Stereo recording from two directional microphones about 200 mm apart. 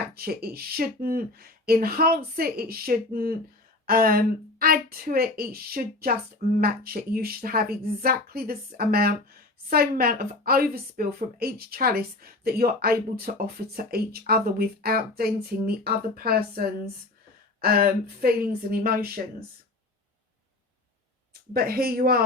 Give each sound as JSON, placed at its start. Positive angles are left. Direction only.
{"t": 0.1, "sound": "a woman's voice", "side_deg": -50}
{"t": 21.5, "sound": "a woman's voice", "side_deg": -45}